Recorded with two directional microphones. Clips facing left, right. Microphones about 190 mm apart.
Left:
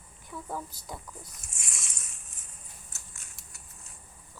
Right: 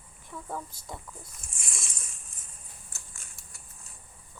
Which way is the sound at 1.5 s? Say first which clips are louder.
Right 5 dB; 30° right (ahead or behind).